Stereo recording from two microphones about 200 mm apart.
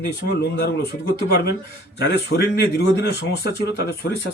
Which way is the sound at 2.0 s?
55° left (ahead or behind).